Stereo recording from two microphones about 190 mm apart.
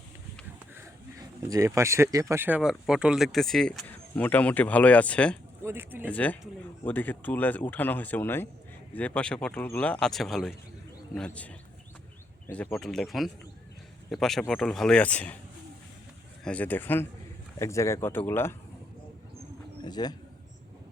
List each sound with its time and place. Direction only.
1.4 s speech: 15° right (ahead or behind); by 5.4 s 5° left (ahead or behind)
5.6 s speech: 10° right (ahead or behind)
6.1 s speech: 10° left (ahead or behind)
16.4 s speech: 5° left (ahead or behind)
19.8 s speech: 20° left (ahead or behind)